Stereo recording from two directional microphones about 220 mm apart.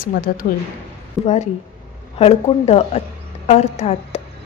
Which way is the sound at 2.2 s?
30° left (ahead or behind).